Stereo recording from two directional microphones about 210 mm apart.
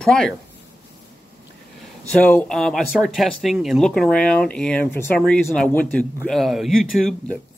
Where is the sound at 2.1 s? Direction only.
10° left (ahead or behind).